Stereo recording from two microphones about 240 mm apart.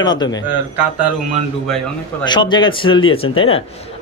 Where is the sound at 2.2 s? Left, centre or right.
Centre.